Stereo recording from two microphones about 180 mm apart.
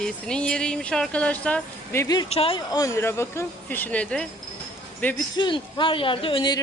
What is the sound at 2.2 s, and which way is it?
Speech, 35° left (ahead or behind).